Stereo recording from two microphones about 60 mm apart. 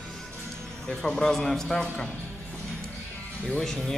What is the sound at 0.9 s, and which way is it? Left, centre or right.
A man's voice, centre.